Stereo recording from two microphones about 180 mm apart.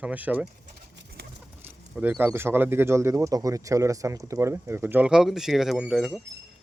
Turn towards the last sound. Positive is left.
turn(degrees=0)  # may be behind; listen again after turning